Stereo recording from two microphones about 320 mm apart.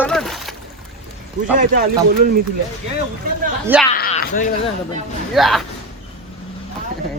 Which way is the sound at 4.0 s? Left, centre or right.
Left.